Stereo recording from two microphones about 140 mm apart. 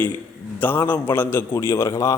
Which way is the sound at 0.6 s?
15° left (ahead or behind).